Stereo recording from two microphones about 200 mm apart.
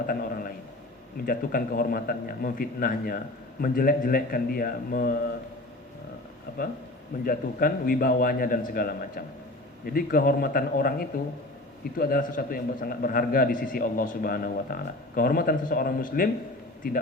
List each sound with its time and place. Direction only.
0.1 s a man's voice: 45° left (ahead or behind)
7.3 s a man's voice: 45° left (ahead or behind)